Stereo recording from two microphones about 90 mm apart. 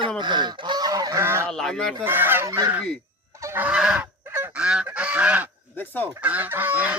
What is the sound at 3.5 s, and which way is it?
Goose, 15° right (ahead or behind).